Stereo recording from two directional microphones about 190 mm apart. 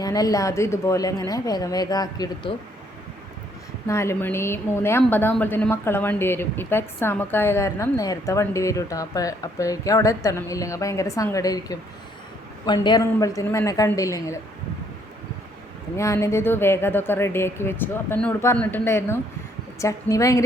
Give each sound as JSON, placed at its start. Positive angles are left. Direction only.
{"t": 0.0, "sound": "a woman's voice", "side_deg": 20}
{"t": 3.8, "sound": "a woman's voice", "side_deg": 15}
{"t": 16.0, "sound": "a woman's voice", "side_deg": 15}